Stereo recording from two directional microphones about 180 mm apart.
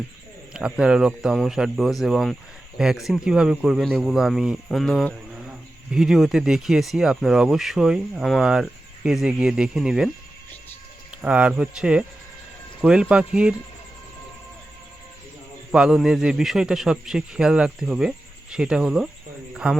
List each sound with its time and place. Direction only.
0.5 s speech: 5° right (ahead or behind)
11.1 s speech: 5° right (ahead or behind)
15.7 s a man's voice: 5° right (ahead or behind)